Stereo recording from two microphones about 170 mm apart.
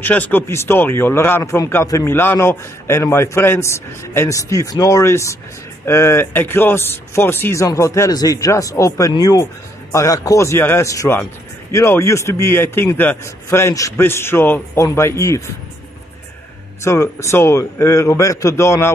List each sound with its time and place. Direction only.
0.0 s speech: 10° left (ahead or behind)
16.8 s speech: 15° left (ahead or behind)